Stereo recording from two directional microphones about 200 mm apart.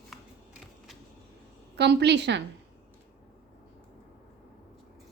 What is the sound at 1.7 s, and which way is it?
Speech, 55° right (ahead or behind).